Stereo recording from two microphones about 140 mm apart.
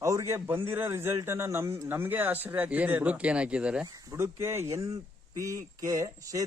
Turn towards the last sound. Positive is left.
turn(degrees=-25)  # may be behind; listen again after turning